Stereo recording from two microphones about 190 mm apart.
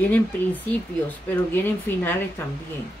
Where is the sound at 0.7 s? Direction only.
10° left (ahead or behind).